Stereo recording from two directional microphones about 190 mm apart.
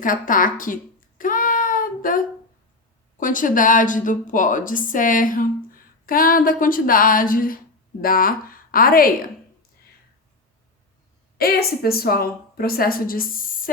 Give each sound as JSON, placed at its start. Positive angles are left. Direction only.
{"t": 0.0, "sound": "a woman's voice", "side_deg": 45}
{"t": 1.2, "sound": "child singing", "side_deg": 45}
{"t": 3.2, "sound": "a woman's voice", "side_deg": 45}
{"t": 11.3, "sound": "a woman's voice", "side_deg": 55}